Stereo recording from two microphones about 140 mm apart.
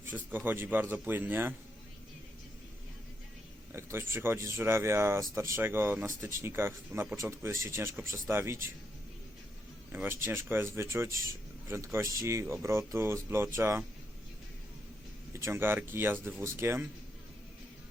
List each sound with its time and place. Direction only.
0.0 s speech: 15° right (ahead or behind)
3.7 s speech: 15° right (ahead or behind)
9.9 s speech: 15° right (ahead or behind)
15.3 s speech: 20° right (ahead or behind)